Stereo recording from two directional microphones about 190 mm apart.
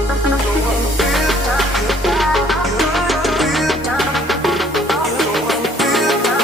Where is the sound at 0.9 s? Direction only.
Centre (ahead or behind).